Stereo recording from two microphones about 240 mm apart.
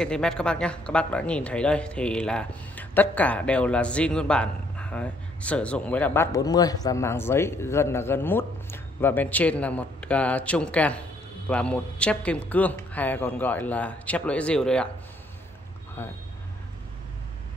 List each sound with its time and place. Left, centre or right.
0.0 s speech: centre
16.0 s speech: centre